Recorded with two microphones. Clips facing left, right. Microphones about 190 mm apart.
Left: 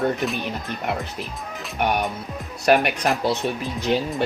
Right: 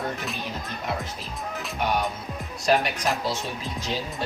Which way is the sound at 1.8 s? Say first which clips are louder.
Left 3 dB; 60° left (ahead or behind).